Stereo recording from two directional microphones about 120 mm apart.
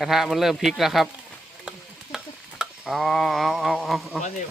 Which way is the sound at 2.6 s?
Centre (ahead or behind).